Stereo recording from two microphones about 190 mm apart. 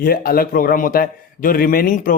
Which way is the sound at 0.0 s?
50° left (ahead or behind).